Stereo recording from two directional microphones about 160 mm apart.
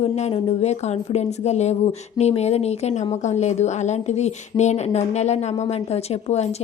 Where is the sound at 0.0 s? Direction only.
40° left (ahead or behind).